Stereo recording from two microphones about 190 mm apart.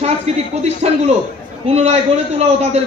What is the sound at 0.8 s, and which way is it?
A man's voice, 40° right (ahead or behind).